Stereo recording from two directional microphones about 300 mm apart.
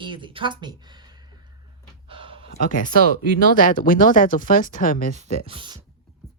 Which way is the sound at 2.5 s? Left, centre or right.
Left.